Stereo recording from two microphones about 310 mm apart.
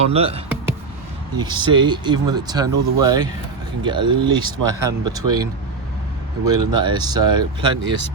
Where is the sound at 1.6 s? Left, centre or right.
Centre.